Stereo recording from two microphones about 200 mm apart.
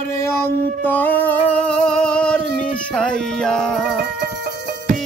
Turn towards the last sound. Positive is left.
turn(degrees=5)  # may be behind; listen again after turning